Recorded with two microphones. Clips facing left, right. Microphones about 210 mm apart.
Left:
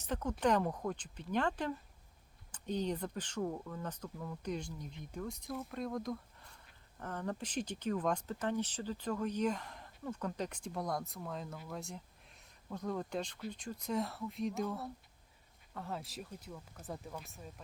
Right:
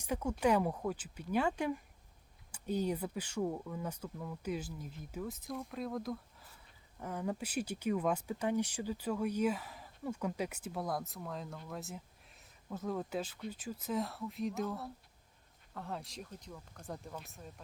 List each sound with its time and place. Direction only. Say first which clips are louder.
0.0 s speech: right 1 dB; 10° right (ahead or behind)